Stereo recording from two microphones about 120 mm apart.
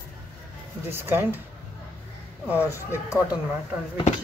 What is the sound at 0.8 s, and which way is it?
Speech, 20° right (ahead or behind).